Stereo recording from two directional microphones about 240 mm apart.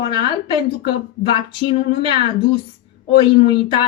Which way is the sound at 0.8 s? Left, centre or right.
Centre.